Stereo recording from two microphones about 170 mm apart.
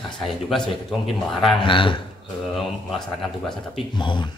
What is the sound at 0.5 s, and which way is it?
A man's voice, centre (ahead or behind).